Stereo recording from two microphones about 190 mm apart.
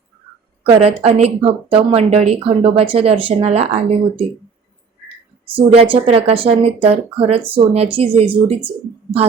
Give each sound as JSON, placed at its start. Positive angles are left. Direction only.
{"t": 0.6, "sound": "speech", "side_deg": -30}
{"t": 5.5, "sound": "speech", "side_deg": -30}